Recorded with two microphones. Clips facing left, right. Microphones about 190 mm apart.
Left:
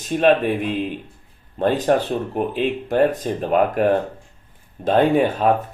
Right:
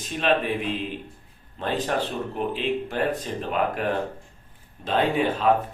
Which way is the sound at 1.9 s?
45° left (ahead or behind).